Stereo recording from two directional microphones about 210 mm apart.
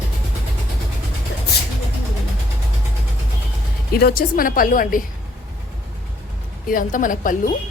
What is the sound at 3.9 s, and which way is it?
A woman's voice, 45° left (ahead or behind).